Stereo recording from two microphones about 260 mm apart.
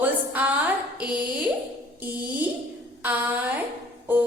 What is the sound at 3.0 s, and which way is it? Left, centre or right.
Speech, centre.